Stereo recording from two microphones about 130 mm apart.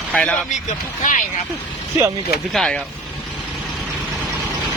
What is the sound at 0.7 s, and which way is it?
Speech, 80° left.